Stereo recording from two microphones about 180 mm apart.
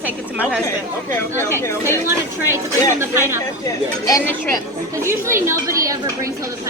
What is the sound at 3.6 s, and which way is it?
Speech, 20° left (ahead or behind).